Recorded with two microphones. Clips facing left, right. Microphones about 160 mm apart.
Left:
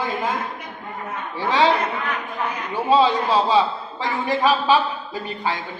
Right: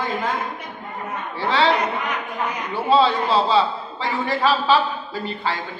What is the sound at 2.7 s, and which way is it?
A man's voice, 15° left (ahead or behind).